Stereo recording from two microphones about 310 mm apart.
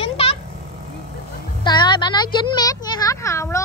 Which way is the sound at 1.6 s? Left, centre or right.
Centre.